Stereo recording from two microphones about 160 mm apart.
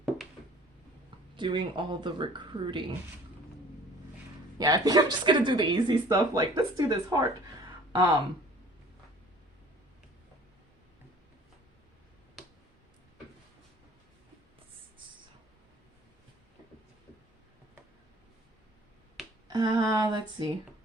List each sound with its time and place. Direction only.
1.4 s speech: 30° right (ahead or behind)
4.5 s speech: 25° right (ahead or behind)
19.5 s a sound: 25° right (ahead or behind)